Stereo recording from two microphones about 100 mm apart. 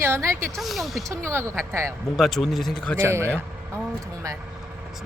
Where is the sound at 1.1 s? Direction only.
30° right (ahead or behind).